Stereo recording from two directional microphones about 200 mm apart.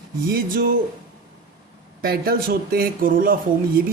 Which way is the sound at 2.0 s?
50° right (ahead or behind).